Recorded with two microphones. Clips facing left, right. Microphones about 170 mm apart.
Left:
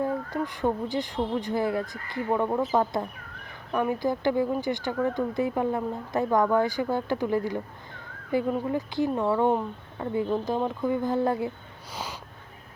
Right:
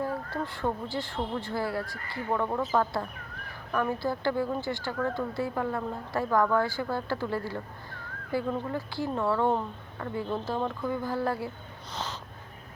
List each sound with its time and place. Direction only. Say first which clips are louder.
0.0 s speech: left 4 dB; 20° left (ahead or behind)